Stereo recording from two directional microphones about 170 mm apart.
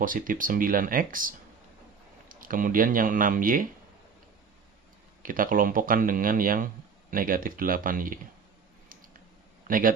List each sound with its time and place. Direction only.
0.0 s speech: 55° right (ahead or behind)
2.3 s speech: 55° right (ahead or behind)
5.2 s speech: 55° right (ahead or behind)
9.6 s a man's voice: 55° right (ahead or behind)